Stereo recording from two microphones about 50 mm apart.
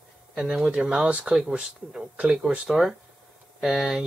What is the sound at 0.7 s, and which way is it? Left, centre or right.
Speech, centre.